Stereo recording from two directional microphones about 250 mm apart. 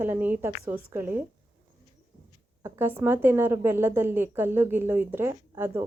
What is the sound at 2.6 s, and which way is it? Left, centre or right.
A woman's voice, centre.